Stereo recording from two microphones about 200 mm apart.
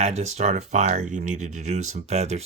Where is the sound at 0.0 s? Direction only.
35° right (ahead or behind).